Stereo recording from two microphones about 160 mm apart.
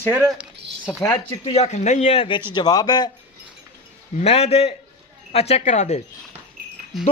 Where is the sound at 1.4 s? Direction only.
40° left (ahead or behind); by 3.1 s 25° left (ahead or behind).